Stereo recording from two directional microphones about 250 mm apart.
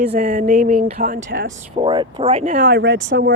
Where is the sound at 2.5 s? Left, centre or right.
Right.